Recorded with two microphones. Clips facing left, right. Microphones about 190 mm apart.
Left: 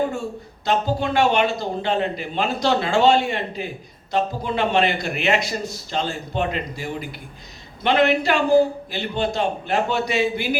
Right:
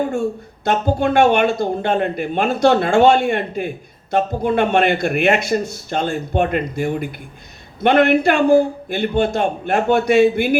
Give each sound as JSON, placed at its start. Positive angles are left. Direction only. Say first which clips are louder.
{"t": 0.6, "sound": "a man's voice", "louder": "right 4 dB", "side_deg": -55}